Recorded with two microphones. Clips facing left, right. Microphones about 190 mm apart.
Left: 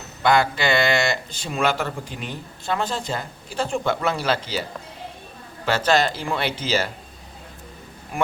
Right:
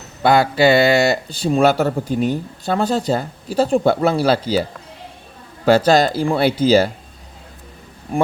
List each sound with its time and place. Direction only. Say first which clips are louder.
0.2 s speech: right 6 dB; 35° right (ahead or behind)
5.6 s speech: right 7 dB; 35° right (ahead or behind)